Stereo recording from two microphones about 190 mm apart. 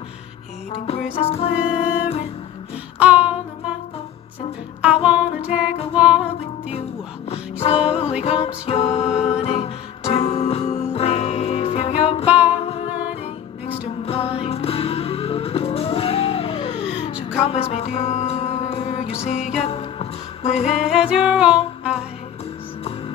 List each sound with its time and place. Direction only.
1.1 s music: 30° left (ahead or behind)
1.6 s music: 5° right (ahead or behind)
5.0 s music: 5° right (ahead or behind)
7.6 s music: 30° left (ahead or behind)
14.0 s music: 30° left (ahead or behind)
21.1 s music: 5° right (ahead or behind)